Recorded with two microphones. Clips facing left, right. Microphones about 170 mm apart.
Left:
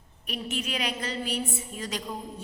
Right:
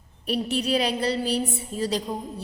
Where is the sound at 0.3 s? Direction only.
35° right (ahead or behind).